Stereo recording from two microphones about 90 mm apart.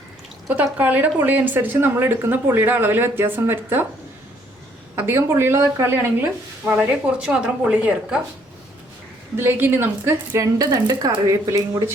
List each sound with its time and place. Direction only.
0.5 s speech: 20° right (ahead or behind)
4.9 s speech: 30° right (ahead or behind)
6.9 s a woman's voice: 10° right (ahead or behind)
9.3 s speech: 25° right (ahead or behind)
10.0 s a woman's voice: 35° right (ahead or behind)